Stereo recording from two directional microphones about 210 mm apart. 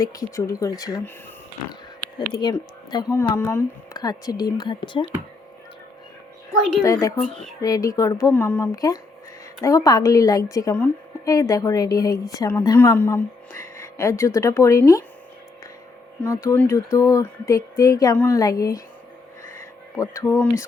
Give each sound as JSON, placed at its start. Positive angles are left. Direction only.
{"t": 0.0, "sound": "a woman's voice", "side_deg": 15}
{"t": 2.4, "sound": "speech", "side_deg": 20}
{"t": 6.8, "sound": "a woman's voice", "side_deg": 15}
{"t": 16.2, "sound": "a woman's voice", "side_deg": 15}
{"t": 20.0, "sound": "a woman's voice", "side_deg": 15}